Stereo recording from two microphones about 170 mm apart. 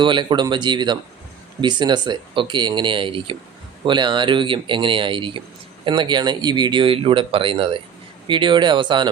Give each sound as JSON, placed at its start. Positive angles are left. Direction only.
{"t": 0.0, "sound": "speech", "side_deg": -30}